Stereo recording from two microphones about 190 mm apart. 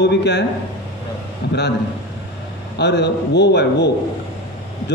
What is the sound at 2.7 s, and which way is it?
A man's voice, 65° left (ahead or behind).